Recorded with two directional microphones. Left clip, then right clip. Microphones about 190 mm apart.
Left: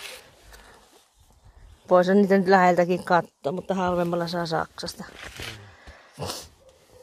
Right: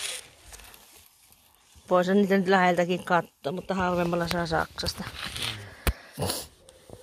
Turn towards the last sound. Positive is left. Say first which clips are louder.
# right 2 dB
turn(degrees=-25)  # may be behind; listen again after turning